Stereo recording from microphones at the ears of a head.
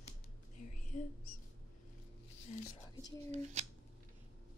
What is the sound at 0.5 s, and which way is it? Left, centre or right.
Mouse, left.